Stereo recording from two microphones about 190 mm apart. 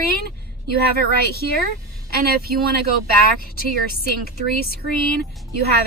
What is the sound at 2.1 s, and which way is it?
Speech, 55° right (ahead or behind).